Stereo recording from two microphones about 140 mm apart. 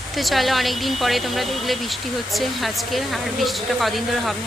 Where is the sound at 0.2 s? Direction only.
Centre (ahead or behind).